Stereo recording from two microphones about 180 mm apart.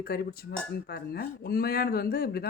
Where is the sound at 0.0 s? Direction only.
60° left (ahead or behind).